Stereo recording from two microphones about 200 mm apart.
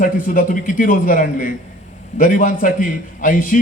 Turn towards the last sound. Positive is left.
turn(degrees=40)  # may be behind; listen again after turning